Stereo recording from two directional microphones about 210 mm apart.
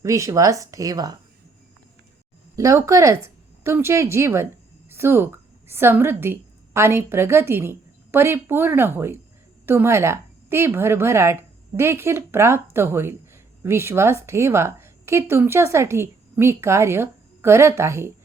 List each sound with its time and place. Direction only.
0.0 s speech: 15° right (ahead or behind)
2.6 s a woman's voice: 15° right (ahead or behind)